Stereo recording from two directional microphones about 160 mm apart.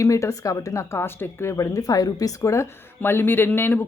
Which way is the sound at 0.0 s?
20° left (ahead or behind).